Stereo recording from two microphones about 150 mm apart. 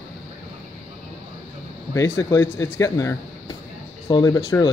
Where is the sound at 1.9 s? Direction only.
20° left (ahead or behind).